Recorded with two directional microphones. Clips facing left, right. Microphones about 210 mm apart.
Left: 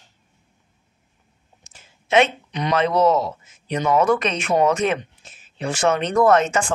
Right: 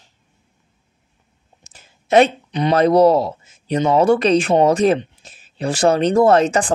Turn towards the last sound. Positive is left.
turn(degrees=-35)  # may be behind; listen again after turning